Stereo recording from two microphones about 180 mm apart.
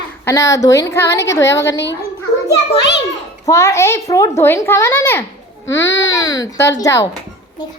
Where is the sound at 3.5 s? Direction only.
15° left (ahead or behind).